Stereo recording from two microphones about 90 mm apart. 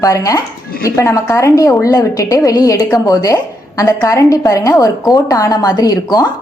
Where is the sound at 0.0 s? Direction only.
40° left (ahead or behind).